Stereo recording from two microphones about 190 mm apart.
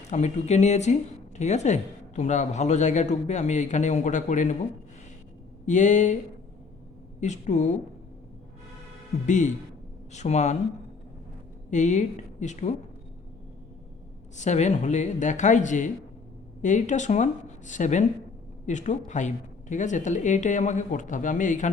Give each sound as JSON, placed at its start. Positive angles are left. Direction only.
{"t": 0.1, "sound": "a man's voice", "side_deg": 35}
{"t": 5.6, "sound": "a man's voice", "side_deg": 40}
{"t": 7.2, "sound": "a man's voice", "side_deg": 40}
{"t": 9.2, "sound": "a man's voice", "side_deg": 40}
{"t": 11.7, "sound": "a man's voice", "side_deg": 40}
{"t": 14.3, "sound": "a man's voice", "side_deg": 35}